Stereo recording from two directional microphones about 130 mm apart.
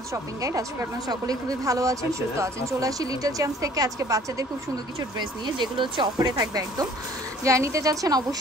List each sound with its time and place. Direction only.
0.1 s speech: 25° right (ahead or behind)
5.6 s speech: 35° right (ahead or behind)